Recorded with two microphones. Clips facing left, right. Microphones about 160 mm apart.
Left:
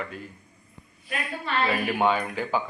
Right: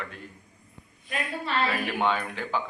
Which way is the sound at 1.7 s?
10° left (ahead or behind).